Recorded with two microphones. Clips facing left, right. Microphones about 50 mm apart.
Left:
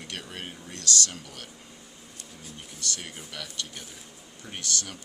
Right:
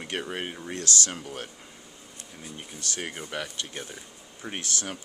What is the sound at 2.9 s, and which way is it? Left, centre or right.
Speech, right.